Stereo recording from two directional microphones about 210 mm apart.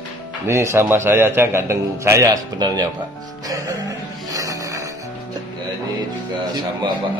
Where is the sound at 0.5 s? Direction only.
15° right (ahead or behind).